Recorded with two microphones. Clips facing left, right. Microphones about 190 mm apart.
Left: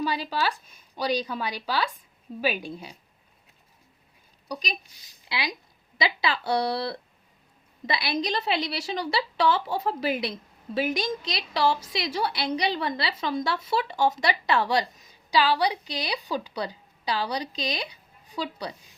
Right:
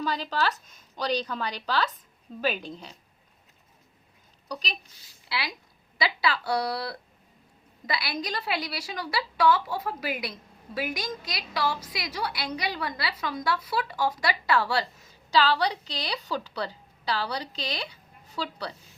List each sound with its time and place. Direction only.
0.0 s a woman's voice: 10° left (ahead or behind)
4.4 s a woman's voice: 15° left (ahead or behind)